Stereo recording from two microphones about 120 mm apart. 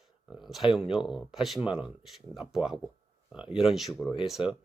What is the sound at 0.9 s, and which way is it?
Speech, 5° right (ahead or behind).